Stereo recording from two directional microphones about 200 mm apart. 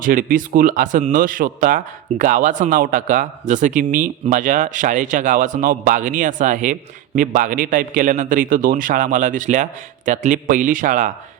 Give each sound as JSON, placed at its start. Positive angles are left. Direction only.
{"t": 0.0, "sound": "speech", "side_deg": -45}